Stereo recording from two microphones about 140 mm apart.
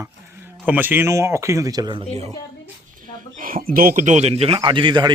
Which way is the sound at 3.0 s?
75° right (ahead or behind).